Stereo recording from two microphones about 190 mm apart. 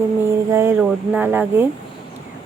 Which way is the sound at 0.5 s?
10° right (ahead or behind).